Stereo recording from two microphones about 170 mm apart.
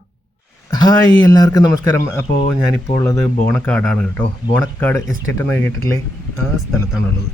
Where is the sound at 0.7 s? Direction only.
20° left (ahead or behind).